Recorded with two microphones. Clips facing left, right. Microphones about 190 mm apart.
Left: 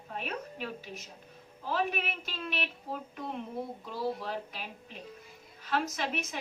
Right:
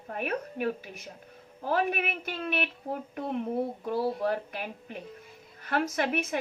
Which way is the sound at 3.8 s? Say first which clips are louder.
Right 6 dB; 60° right (ahead or behind).